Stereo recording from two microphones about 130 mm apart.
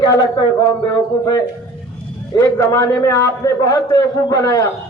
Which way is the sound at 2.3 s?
25° left (ahead or behind).